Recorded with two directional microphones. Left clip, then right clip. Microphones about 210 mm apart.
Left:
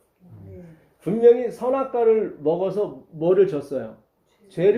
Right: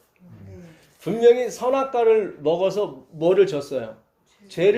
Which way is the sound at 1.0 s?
25° right (ahead or behind).